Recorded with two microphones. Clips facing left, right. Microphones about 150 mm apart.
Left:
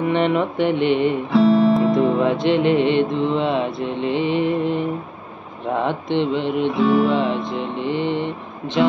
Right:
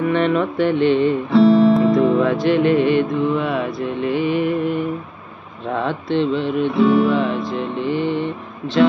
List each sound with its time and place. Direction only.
0.0 s music: 20° left (ahead or behind)
1.3 s music: centre (ahead or behind)
2.0 s music: 20° left (ahead or behind)
6.7 s guitar: centre (ahead or behind)
7.1 s music: 20° left (ahead or behind)